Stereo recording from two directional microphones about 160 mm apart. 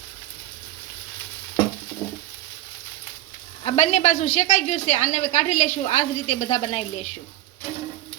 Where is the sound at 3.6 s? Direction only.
40° left (ahead or behind).